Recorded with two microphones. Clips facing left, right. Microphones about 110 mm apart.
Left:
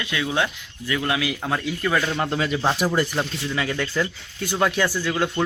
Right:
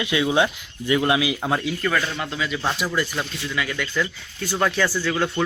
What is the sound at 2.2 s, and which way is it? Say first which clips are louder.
Speech: left 3 dB; 45° left (ahead or behind).